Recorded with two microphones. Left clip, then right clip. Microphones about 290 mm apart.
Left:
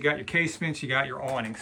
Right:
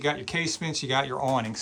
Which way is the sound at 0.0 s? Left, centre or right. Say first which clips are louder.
Left 2 dB; centre.